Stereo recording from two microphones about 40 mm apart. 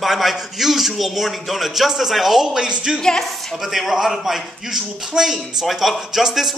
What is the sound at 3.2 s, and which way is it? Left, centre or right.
A man's voice, centre.